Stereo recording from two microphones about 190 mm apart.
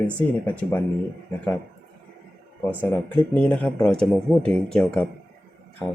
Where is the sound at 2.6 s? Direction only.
10° left (ahead or behind).